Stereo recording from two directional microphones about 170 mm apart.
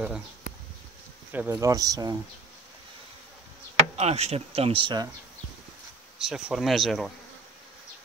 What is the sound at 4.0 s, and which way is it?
Speech, 40° right (ahead or behind).